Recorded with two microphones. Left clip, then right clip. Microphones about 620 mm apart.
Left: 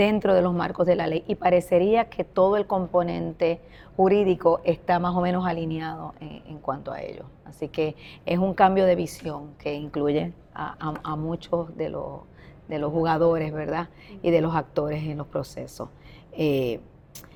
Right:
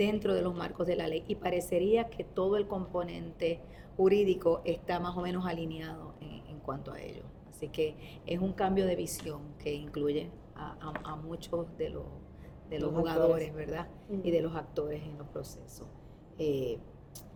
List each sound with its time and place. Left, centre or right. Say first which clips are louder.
0.0 s speech: left 10 dB; left